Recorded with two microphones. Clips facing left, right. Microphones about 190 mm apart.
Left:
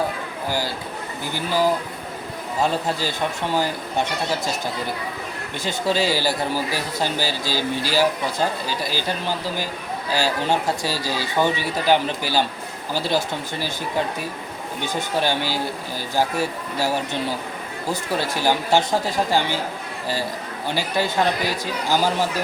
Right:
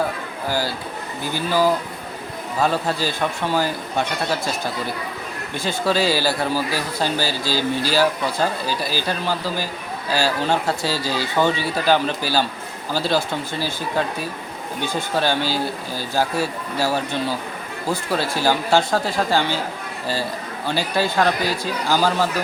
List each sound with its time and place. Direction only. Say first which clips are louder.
2.6 s speech: right 3 dB; 20° left (ahead or behind)
5.5 s speech: right 2 dB; 20° left (ahead or behind)
15.1 s speech: right 2 dB; 15° left (ahead or behind)
20.7 s speech: right 2 dB; 15° left (ahead or behind)